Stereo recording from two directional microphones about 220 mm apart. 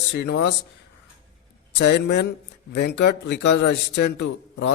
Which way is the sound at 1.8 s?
50° left (ahead or behind).